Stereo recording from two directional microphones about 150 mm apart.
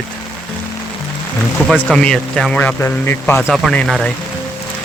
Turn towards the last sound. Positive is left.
turn(degrees=5)  # may be behind; listen again after turning